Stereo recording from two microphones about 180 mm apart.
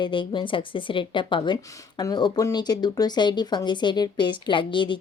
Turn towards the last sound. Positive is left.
turn(degrees=25)  # may be behind; listen again after turning